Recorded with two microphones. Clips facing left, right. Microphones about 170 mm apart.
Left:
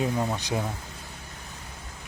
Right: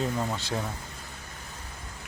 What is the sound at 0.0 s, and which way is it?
Speech, 15° left (ahead or behind).